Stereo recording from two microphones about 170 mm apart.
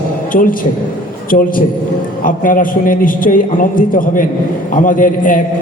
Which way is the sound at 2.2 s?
55° left (ahead or behind).